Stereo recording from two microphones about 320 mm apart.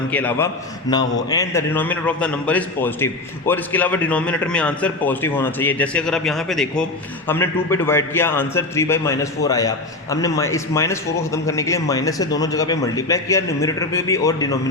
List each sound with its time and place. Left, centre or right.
0.1 s a man's voice: centre